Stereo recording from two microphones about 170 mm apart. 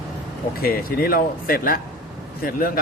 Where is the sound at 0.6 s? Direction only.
60° left (ahead or behind).